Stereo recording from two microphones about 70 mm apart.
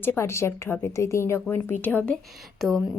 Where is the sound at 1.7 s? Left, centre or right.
Left.